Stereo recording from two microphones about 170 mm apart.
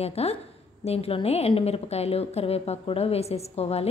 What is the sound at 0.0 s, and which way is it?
A woman's voice, 35° left (ahead or behind).